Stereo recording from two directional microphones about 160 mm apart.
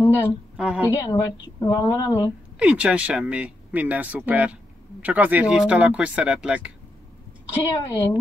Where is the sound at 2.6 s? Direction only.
5° right (ahead or behind).